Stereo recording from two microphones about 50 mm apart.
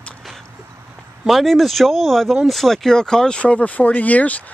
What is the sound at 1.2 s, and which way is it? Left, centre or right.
Speech, centre.